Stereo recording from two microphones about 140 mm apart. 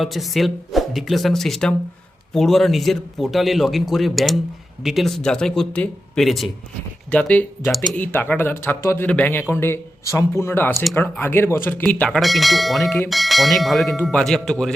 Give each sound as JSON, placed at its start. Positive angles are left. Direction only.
{"t": 0.0, "sound": "a man's voice", "side_deg": 0}